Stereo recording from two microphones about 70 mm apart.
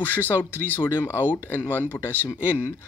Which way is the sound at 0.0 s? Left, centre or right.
Left.